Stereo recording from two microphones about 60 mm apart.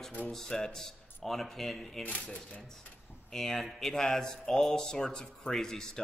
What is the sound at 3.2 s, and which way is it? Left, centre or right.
Speech, centre.